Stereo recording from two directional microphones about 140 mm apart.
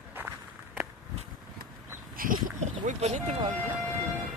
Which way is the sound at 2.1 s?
85° right.